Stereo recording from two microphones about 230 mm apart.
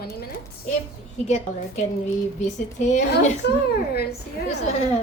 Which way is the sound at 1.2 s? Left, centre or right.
Left.